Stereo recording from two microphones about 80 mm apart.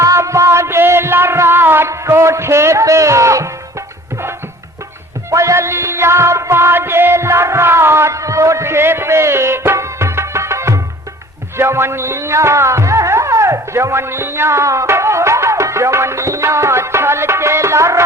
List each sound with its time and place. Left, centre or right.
0.0 s music: right
1.9 s speech: right
5.3 s music: right